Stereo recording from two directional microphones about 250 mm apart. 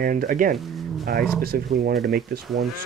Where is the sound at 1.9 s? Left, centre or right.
Centre.